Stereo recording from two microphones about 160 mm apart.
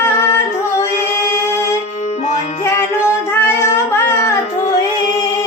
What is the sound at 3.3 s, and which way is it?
Child singing, 15° left (ahead or behind).